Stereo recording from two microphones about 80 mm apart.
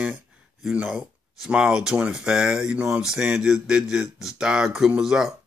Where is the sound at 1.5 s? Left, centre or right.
Centre.